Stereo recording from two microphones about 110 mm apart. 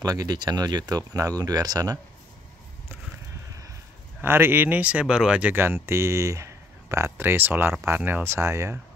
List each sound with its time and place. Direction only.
0.0 s speech: 35° right (ahead or behind)
4.2 s speech: 20° right (ahead or behind)